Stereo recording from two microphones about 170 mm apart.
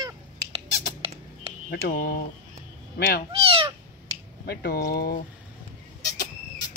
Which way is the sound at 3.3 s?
35° right (ahead or behind).